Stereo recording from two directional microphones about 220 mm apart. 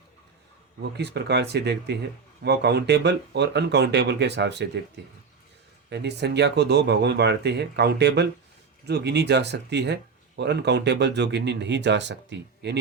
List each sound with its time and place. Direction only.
0.8 s speech: 50° right (ahead or behind)
5.9 s speech: 50° right (ahead or behind)